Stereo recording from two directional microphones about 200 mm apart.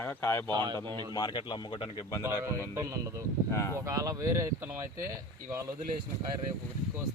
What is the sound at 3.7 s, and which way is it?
Speech, 15° right (ahead or behind).